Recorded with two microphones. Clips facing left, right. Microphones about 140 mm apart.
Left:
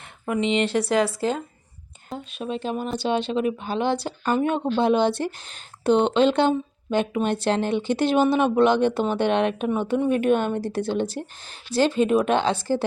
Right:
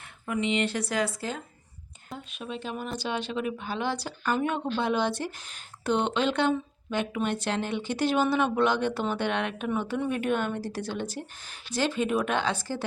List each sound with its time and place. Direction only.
0.3 s speech: 25° left (ahead or behind)